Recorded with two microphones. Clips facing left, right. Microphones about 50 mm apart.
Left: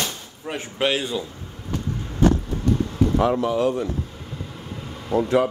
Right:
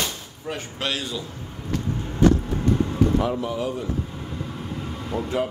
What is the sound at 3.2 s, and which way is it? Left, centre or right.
Speech, left.